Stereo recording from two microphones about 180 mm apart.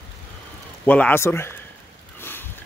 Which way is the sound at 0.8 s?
10° left (ahead or behind).